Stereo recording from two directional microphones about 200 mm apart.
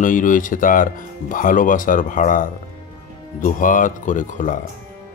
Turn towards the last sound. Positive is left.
turn(degrees=40)  # may be behind; listen again after turning